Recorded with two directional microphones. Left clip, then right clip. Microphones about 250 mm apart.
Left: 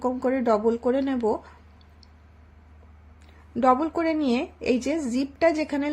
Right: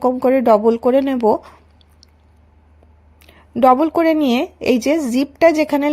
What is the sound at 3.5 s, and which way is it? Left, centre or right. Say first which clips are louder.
A woman's voice: right 9 dB; right.